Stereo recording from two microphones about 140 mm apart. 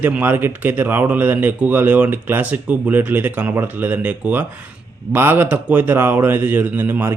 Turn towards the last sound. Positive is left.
turn(degrees=-15)  # may be behind; listen again after turning